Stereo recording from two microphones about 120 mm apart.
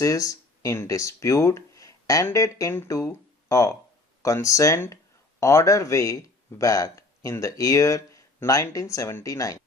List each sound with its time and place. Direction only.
0.0 s speech: 25° left (ahead or behind)